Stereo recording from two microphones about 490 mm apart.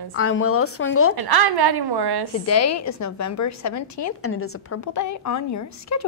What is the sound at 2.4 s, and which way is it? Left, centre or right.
A woman's voice, left.